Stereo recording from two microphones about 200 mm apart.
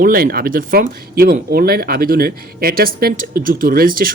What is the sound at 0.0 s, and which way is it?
Speech, 50° right (ahead or behind).